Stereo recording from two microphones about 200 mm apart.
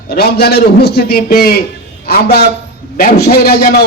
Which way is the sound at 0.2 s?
50° left (ahead or behind).